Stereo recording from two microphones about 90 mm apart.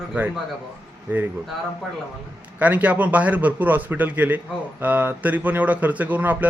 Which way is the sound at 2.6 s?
15° right (ahead or behind).